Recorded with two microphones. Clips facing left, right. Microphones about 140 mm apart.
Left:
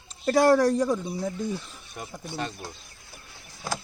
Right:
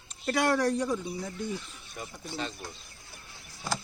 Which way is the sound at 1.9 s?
55° left (ahead or behind).